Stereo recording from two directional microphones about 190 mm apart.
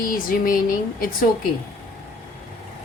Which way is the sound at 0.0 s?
45° left (ahead or behind).